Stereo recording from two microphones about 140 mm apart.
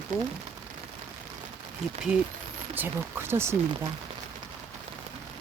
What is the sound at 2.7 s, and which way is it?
Speech, 15° right (ahead or behind).